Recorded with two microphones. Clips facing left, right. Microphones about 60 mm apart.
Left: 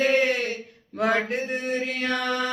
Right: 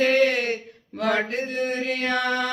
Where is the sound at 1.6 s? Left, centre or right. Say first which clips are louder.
Right 1 dB; right.